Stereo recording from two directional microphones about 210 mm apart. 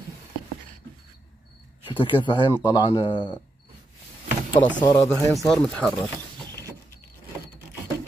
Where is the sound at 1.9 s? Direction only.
25° left (ahead or behind).